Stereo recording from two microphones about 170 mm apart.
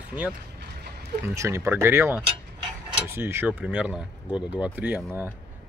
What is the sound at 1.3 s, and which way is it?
Speech, 15° right (ahead or behind).